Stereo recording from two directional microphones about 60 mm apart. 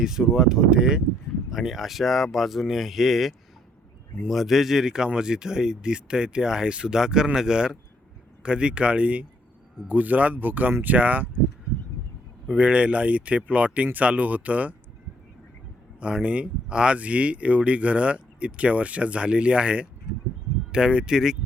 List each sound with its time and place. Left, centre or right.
0.0 s speech: centre; by 11.3 s right
12.5 s speech: right
16.0 s speech: centre